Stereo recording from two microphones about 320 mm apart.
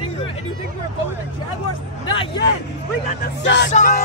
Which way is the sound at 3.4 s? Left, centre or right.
Left.